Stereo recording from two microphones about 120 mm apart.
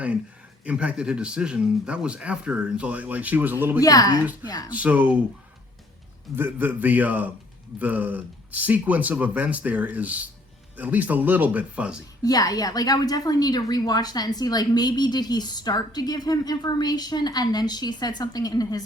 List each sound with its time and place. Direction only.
0.6 s speech: 10° right (ahead or behind)
3.8 s a woman's voice: 30° left (ahead or behind)
4.7 s speech: 10° right (ahead or behind)
6.3 s speech: 15° right (ahead or behind)
12.2 s a woman's voice: 30° left (ahead or behind)